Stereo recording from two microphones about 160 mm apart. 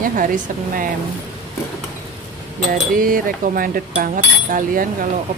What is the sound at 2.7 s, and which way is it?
Speech, 60° right (ahead or behind).